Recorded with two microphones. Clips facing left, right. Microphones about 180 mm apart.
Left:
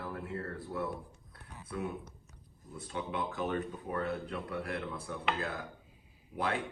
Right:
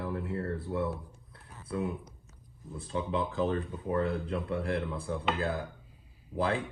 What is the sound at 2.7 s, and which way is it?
Speech, 35° right (ahead or behind).